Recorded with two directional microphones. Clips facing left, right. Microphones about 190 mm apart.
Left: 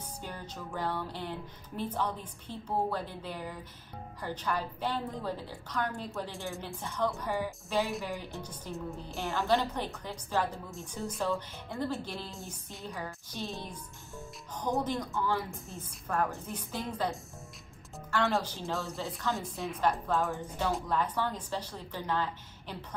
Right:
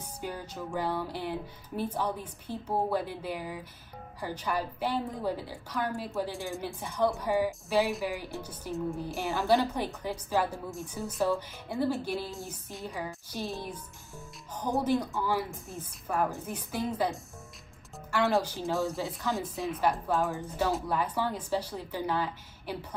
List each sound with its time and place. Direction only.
0.0 s music: 10° right (ahead or behind)
19.3 s music: centre (ahead or behind)